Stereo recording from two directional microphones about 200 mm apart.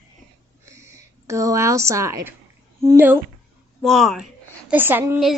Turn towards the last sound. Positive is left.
turn(degrees=-10)  # may be behind; listen again after turning